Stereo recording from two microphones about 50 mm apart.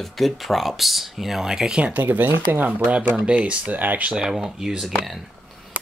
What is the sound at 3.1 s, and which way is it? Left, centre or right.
Speech, right.